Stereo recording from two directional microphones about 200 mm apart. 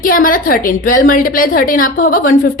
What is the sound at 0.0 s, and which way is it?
A woman's voice, 45° left (ahead or behind).